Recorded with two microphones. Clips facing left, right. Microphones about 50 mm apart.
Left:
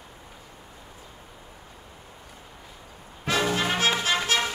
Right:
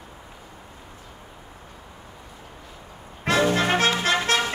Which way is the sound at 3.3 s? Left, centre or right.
Right.